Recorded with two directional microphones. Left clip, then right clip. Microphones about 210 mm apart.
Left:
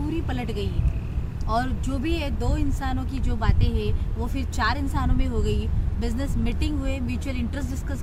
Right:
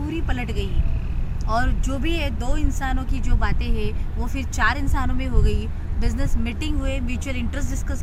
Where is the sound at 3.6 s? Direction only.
40° left (ahead or behind).